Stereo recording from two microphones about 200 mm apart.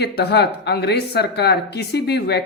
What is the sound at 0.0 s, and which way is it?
Speech, 55° left (ahead or behind).